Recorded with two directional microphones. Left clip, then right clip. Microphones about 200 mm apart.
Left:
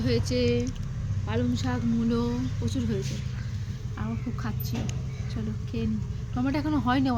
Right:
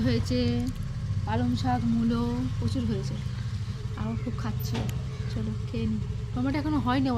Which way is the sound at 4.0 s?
15° right (ahead or behind).